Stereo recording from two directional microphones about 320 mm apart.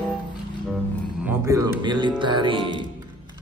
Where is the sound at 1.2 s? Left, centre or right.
Centre.